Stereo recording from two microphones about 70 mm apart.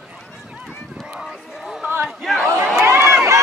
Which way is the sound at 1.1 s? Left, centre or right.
Centre.